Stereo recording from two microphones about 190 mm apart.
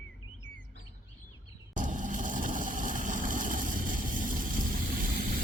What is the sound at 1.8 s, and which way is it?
Vehicle, 45° right (ahead or behind).